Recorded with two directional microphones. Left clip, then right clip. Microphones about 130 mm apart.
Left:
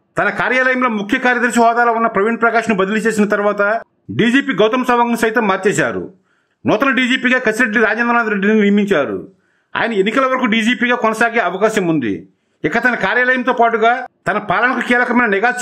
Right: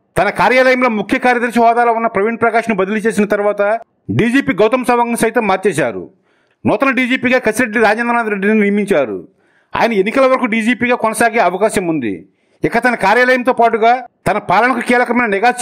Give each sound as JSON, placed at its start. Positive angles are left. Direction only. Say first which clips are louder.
{"t": 0.1, "sound": "a man's voice", "louder": "right 4 dB", "side_deg": -35}